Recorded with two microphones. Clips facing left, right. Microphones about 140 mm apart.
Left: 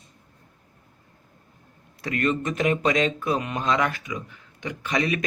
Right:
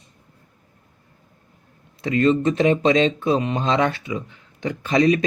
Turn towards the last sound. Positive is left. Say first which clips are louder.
# right 8 dB
turn(degrees=-30)  # may be behind; listen again after turning